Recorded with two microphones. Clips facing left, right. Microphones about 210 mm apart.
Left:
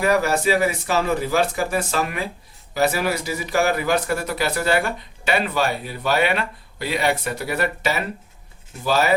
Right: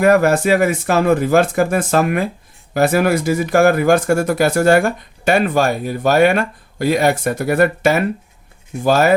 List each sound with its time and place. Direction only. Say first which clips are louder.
0.0 s speech: right 7 dB; 50° right (ahead or behind)